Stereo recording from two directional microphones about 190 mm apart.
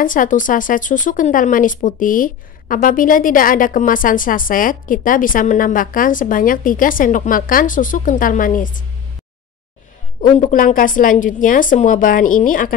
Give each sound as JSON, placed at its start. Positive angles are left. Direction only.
{"t": 0.0, "sound": "speech", "side_deg": 45}
{"t": 10.4, "sound": "speech", "side_deg": 45}